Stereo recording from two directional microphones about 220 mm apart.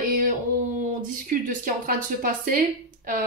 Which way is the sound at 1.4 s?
40° right (ahead or behind).